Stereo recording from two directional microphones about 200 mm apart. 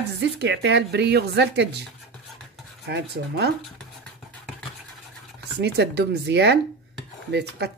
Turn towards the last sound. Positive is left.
turn(degrees=-60)  # may be behind; listen again after turning